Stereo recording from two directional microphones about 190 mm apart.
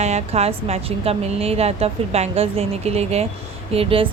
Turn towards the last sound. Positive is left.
turn(degrees=-30)  # may be behind; listen again after turning